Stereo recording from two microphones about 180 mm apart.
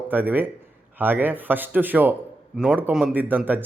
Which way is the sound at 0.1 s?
10° right (ahead or behind).